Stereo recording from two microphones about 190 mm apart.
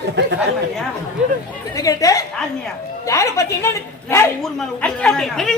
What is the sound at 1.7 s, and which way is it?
A woman's voice, 15° left (ahead or behind).